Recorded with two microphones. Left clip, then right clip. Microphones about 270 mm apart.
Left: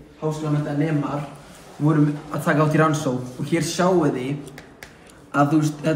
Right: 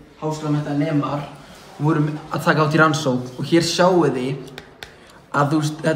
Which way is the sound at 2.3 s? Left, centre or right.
Right.